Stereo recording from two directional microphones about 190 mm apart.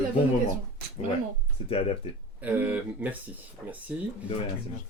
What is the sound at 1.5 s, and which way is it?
Speech, 30° left (ahead or behind).